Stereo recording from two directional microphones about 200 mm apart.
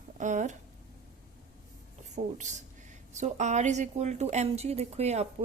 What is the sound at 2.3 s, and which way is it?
Speech, 35° right (ahead or behind).